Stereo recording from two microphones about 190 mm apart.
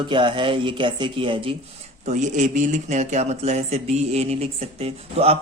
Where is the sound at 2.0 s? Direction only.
40° right (ahead or behind).